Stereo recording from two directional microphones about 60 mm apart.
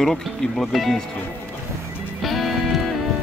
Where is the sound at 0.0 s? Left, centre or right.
Centre.